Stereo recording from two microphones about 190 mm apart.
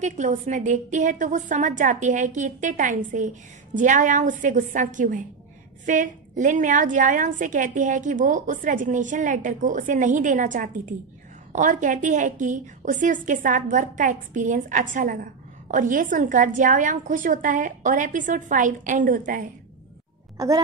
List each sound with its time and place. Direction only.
0.0 s a woman's voice: 40° right (ahead or behind)
20.3 s speech: 20° right (ahead or behind)